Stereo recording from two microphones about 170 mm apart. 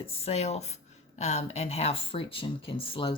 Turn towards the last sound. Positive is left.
turn(degrees=30)  # may be behind; listen again after turning